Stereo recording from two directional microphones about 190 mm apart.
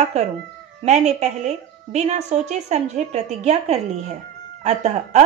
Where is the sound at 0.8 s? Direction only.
35° right (ahead or behind).